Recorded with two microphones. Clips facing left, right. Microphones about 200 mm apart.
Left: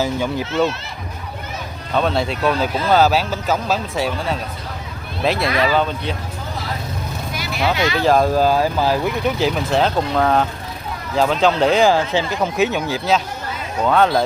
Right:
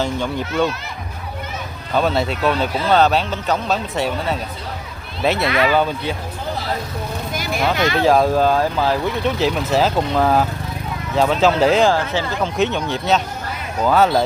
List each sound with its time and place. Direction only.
0.0 s speech: 5° left (ahead or behind)
1.9 s speech: 5° right (ahead or behind)
7.3 s vehicle: 45° right (ahead or behind)
7.8 s speech: 50° right (ahead or behind)
8.0 s speech: centre (ahead or behind)